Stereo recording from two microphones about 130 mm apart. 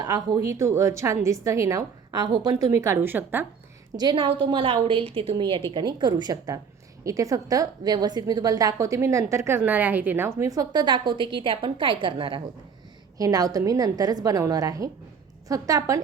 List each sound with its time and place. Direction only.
0.0 s a woman's voice: 30° right (ahead or behind)
2.8 s a woman's voice: 20° right (ahead or behind)
3.9 s a woman's voice: 35° right (ahead or behind)
13.1 s a woman's voice: 30° right (ahead or behind)